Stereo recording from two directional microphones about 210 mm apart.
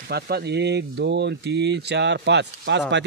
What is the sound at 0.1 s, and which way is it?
Speech, 50° right (ahead or behind).